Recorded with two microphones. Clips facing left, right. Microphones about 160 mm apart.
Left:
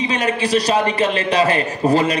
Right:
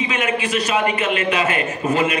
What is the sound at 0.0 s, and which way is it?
A man's voice, 35° left (ahead or behind).